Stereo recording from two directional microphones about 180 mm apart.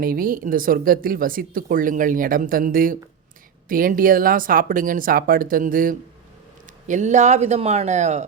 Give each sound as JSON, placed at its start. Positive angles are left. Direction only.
{"t": 0.0, "sound": "speech", "side_deg": -50}